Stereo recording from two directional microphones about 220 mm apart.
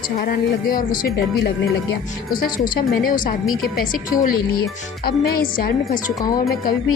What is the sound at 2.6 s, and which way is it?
Speech, 40° left (ahead or behind).